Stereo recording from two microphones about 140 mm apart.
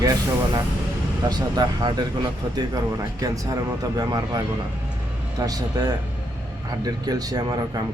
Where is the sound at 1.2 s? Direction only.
30° right (ahead or behind).